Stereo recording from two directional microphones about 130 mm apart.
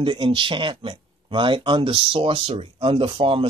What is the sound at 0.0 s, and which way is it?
Speech, 40° right (ahead or behind).